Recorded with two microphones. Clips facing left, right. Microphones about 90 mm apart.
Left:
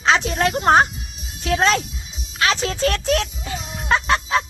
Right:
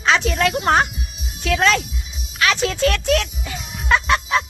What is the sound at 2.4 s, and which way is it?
Music, 35° left (ahead or behind).